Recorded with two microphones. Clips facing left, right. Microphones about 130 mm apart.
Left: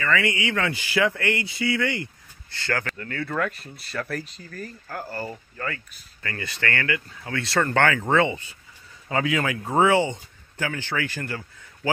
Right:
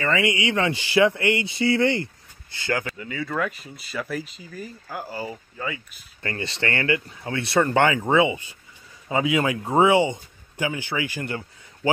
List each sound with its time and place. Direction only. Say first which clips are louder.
0.0 s speech: right 2 dB; 20° right (ahead or behind)
2.5 s speech: right 2 dB; 15° right (ahead or behind)
3.0 s speech: even; 5° right (ahead or behind)
6.2 s speech: right 2 dB; 25° right (ahead or behind)